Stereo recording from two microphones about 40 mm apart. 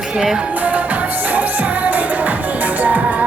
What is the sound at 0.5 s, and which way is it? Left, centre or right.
Music, right.